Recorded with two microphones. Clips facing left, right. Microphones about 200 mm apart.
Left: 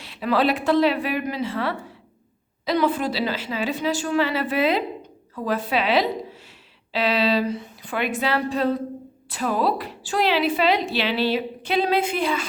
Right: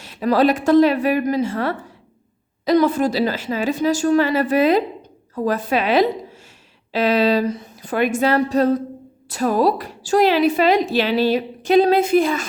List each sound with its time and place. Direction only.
0.0 s a woman's voice: 45° right (ahead or behind)